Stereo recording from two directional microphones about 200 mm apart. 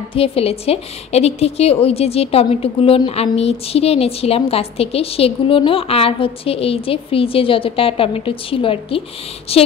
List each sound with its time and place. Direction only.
0.1 s a woman's voice: 30° left (ahead or behind)